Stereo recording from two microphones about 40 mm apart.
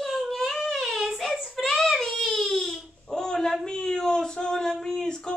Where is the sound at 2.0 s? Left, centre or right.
Centre.